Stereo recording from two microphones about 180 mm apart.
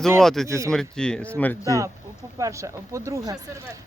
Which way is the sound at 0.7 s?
5° left (ahead or behind).